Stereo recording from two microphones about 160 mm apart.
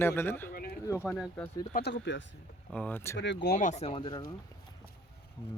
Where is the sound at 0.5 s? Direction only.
70° left (ahead or behind).